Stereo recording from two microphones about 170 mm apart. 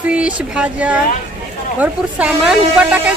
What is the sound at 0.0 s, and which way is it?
Speech, 5° right (ahead or behind).